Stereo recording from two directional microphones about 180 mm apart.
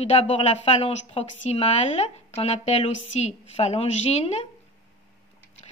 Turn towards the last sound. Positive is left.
turn(degrees=35)  # may be behind; listen again after turning